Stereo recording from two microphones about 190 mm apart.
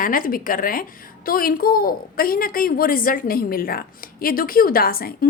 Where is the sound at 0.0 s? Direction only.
45° left (ahead or behind).